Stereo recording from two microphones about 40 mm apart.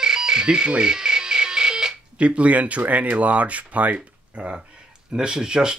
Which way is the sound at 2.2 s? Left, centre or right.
Right.